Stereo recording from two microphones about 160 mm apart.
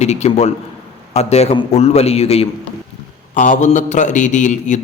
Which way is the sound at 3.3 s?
55° left (ahead or behind).